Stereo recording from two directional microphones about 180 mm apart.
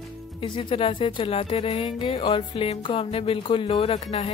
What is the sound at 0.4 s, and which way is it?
Speech, 30° left (ahead or behind).